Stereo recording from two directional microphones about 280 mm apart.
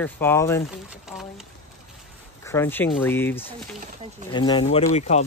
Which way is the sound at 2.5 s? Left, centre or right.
Centre.